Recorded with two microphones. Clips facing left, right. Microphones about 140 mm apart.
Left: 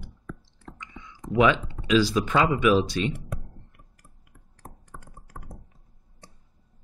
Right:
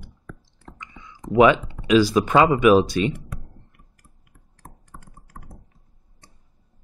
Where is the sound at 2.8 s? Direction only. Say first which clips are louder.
Right 5 dB; 5° right (ahead or behind).